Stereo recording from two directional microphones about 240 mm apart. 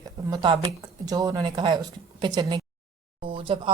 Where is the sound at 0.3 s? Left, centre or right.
Centre.